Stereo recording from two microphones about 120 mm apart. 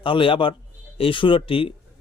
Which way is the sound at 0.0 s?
45° left (ahead or behind).